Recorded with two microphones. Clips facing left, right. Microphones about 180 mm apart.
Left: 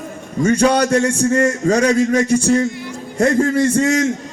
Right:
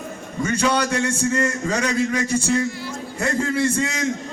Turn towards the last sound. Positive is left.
turn(degrees=40)  # may be behind; listen again after turning